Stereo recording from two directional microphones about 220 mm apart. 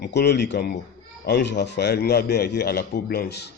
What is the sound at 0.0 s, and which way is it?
A man's voice, 50° left (ahead or behind).